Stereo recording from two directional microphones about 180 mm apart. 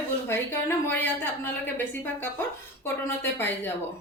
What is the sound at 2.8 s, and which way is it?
Speech, 10° left (ahead or behind).